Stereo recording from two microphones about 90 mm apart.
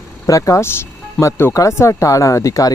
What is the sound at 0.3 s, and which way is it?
Speech, 35° left (ahead or behind).